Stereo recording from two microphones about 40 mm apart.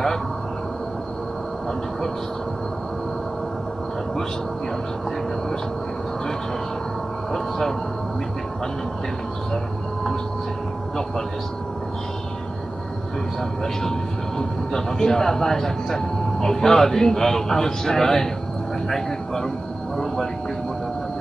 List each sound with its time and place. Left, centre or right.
7.3 s speech: centre
14.7 s speech: centre